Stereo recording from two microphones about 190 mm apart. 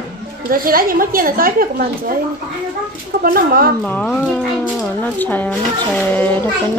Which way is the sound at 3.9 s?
5° left (ahead or behind).